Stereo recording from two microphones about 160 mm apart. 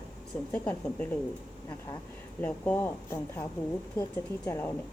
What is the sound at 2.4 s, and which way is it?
Speech, 10° left (ahead or behind).